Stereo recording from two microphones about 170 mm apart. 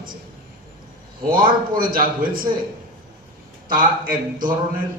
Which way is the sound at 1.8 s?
55° right (ahead or behind).